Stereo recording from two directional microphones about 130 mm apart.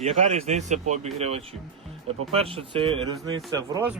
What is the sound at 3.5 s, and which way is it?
Speech, 25° right (ahead or behind).